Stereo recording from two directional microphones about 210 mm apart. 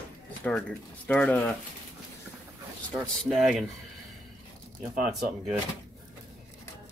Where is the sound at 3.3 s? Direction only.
Centre (ahead or behind).